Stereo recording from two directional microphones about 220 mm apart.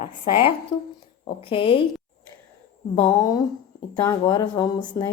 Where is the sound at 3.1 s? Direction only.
15° left (ahead or behind).